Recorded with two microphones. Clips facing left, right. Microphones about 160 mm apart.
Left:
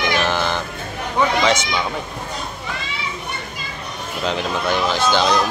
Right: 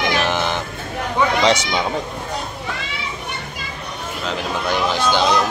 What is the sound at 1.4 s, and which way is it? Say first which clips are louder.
Speech: right 2 dB; 30° right (ahead or behind).